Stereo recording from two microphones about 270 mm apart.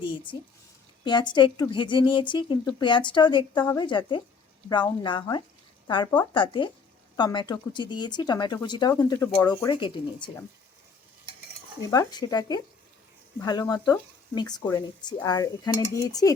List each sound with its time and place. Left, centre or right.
0.3 s speech: centre
11.9 s speech: centre